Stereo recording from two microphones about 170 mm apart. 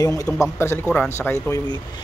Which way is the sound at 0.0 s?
20° left (ahead or behind).